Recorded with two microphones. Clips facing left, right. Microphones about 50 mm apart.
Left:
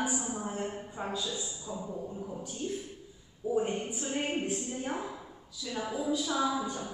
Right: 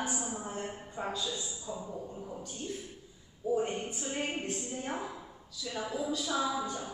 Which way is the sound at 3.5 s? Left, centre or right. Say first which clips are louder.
Left 1 dB; centre.